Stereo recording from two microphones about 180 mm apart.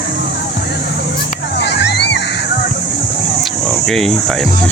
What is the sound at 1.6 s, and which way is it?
Music, 70° left (ahead or behind).